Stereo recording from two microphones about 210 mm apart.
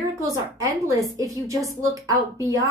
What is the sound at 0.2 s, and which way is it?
A woman's voice, 15° right (ahead or behind).